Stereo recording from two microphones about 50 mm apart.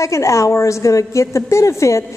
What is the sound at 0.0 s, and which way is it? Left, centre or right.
A woman's voice, left.